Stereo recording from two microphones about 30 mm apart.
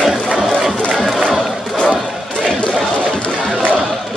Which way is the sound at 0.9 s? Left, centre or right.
Centre.